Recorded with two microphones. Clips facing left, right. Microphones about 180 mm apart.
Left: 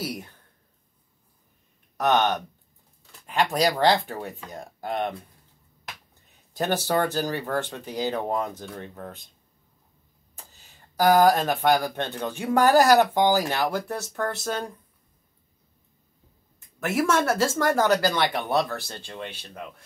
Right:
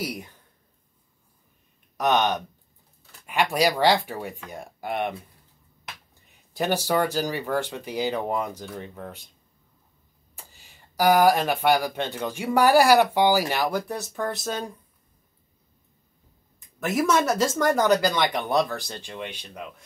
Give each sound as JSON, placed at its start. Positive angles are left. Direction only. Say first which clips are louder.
{"t": 0.0, "sound": "speech", "louder": "even", "side_deg": -15}
{"t": 2.0, "sound": "speech", "louder": "even", "side_deg": -15}
{"t": 3.1, "sound": "a sound", "louder": "even", "side_deg": -10}
{"t": 3.8, "sound": "speech", "louder": "even", "side_deg": -10}
{"t": 6.5, "sound": "speech", "louder": "right 1 dB", "side_deg": -10}
{"t": 10.3, "sound": "speech", "louder": "even", "side_deg": -10}
{"t": 16.8, "sound": "speech", "louder": "right 1 dB", "side_deg": -15}